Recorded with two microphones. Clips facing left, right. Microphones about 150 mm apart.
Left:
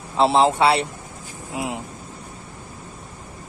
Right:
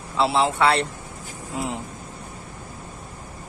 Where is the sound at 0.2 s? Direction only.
25° left (ahead or behind).